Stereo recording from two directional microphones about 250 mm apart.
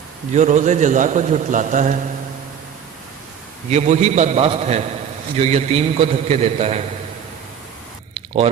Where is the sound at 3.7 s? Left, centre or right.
Right.